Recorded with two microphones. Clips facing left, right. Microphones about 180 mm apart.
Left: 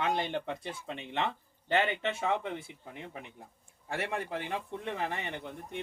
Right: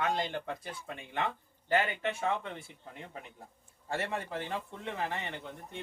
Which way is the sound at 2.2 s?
65° left (ahead or behind).